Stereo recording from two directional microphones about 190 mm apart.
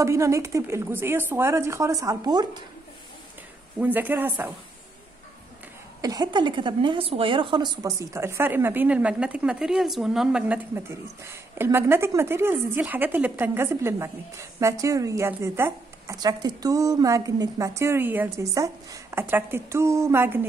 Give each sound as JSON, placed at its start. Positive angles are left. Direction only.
{"t": 0.0, "sound": "a woman's voice", "side_deg": -15}
{"t": 3.8, "sound": "a woman's voice", "side_deg": -10}
{"t": 5.9, "sound": "a woman's voice", "side_deg": -20}